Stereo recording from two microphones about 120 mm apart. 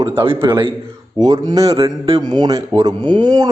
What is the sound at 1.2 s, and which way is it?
Speech, 35° right (ahead or behind).